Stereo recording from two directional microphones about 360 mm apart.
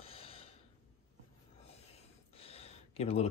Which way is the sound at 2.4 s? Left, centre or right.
Centre.